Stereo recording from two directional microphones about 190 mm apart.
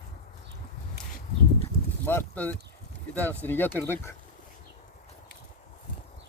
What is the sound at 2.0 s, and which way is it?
Speech, 10° left (ahead or behind).